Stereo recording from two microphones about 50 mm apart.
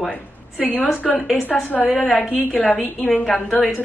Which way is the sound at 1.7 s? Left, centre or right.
Left.